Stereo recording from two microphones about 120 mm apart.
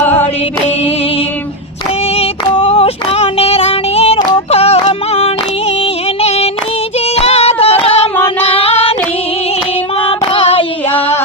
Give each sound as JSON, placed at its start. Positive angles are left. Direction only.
{"t": 0.0, "sound": "mantra", "side_deg": 15}
{"t": 2.1, "sound": "female singing", "side_deg": 50}
{"t": 5.8, "sound": "music", "side_deg": 60}
{"t": 7.2, "sound": "a sound", "side_deg": 60}
{"t": 8.4, "sound": "female singing", "side_deg": 55}
{"t": 10.1, "sound": "child singing", "side_deg": 50}